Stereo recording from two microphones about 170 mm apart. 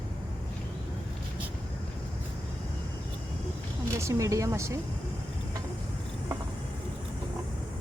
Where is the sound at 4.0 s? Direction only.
20° right (ahead or behind).